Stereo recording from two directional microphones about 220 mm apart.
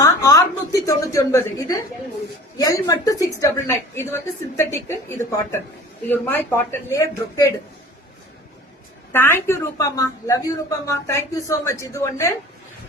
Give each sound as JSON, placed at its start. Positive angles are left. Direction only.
{"t": 0.0, "sound": "a woman's voice", "side_deg": 15}
{"t": 9.1, "sound": "a woman's voice", "side_deg": 10}